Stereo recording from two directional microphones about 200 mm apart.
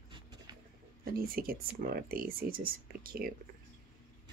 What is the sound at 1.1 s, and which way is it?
Speech, 45° right (ahead or behind).